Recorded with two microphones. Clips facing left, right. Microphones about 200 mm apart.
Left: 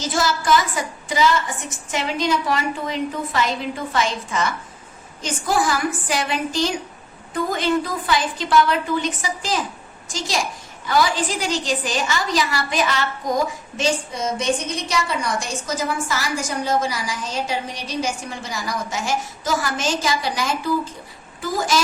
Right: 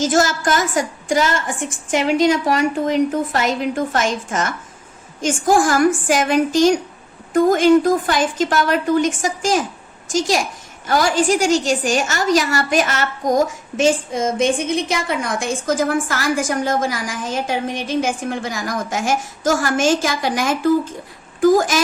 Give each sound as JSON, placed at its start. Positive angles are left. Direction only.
{"t": 0.0, "sound": "a woman's voice", "side_deg": -50}